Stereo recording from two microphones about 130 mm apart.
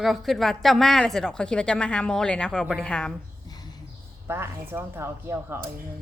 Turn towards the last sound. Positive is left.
turn(degrees=-20)  # may be behind; listen again after turning